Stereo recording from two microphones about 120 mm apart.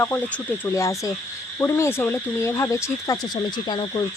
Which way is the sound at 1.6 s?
20° left (ahead or behind).